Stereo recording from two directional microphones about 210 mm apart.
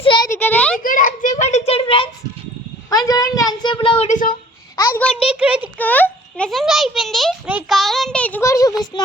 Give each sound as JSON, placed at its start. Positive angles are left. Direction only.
{"t": 0.0, "sound": "a sound", "side_deg": 25}
{"t": 0.3, "sound": "a child's voice", "side_deg": 10}
{"t": 0.8, "sound": "a child's voice", "side_deg": 40}
{"t": 4.9, "sound": "a child's voice", "side_deg": 0}
{"t": 5.7, "sound": "a child's voice", "side_deg": 10}